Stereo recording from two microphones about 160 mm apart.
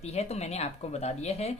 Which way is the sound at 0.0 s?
40° left (ahead or behind).